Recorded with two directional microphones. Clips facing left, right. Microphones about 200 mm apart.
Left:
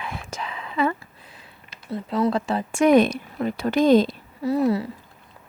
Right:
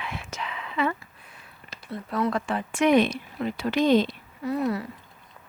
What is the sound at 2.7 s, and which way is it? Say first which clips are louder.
A woman's voice: left 4 dB; 45° left (ahead or behind).